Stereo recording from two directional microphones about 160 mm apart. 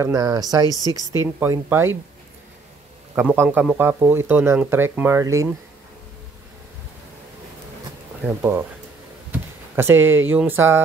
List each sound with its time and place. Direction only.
0.0 s speech: 20° right (ahead or behind)
3.2 s speech: 10° right (ahead or behind)
8.4 s speech: 15° right (ahead or behind)